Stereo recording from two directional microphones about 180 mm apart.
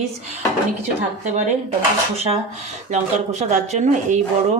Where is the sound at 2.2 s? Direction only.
35° right (ahead or behind).